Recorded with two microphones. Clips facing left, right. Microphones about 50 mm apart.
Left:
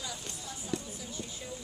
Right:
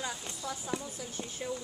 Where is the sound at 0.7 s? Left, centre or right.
Right.